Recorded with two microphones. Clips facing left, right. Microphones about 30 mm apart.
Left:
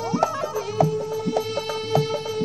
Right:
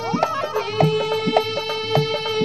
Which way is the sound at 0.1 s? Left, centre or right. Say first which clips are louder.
Right 2 dB; right.